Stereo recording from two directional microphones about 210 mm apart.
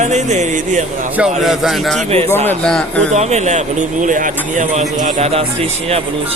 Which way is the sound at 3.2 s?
35° right (ahead or behind).